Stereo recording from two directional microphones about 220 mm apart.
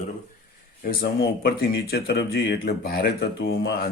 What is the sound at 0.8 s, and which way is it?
Speech, 45° left (ahead or behind).